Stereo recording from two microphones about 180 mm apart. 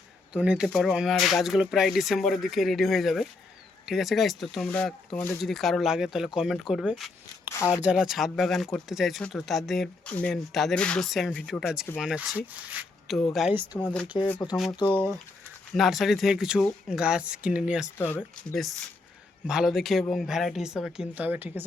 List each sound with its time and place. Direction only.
0.3 s speech: 5° right (ahead or behind)
13.7 s speech: 5° left (ahead or behind)
14.3 s speech: 20° left (ahead or behind)
15.7 s speech: centre (ahead or behind)
17.9 s speech: 10° left (ahead or behind)
19.5 s speech: 5° right (ahead or behind)